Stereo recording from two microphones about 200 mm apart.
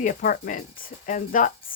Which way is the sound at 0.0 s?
45° left (ahead or behind).